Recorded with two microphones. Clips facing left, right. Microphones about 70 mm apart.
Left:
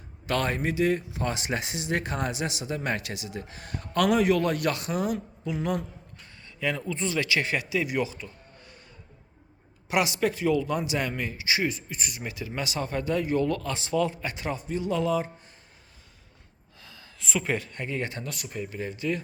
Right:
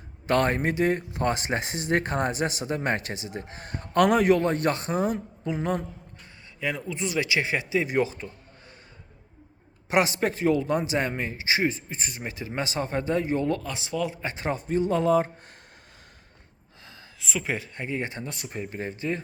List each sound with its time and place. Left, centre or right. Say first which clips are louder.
0.3 s speech: right 4 dB; right
4.4 s speech: right 2 dB; right
6.6 s speech: left 1 dB; centre; by 8.3 s right
9.9 s speech: right 2 dB; right
13.7 s speech: left 3 dB; centre
14.2 s speech: right 2 dB; right
17.2 s speech: left 1 dB; centre
17.5 s speech: even; centre